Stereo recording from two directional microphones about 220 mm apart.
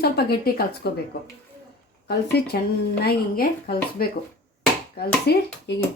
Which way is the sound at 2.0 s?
45° left (ahead or behind).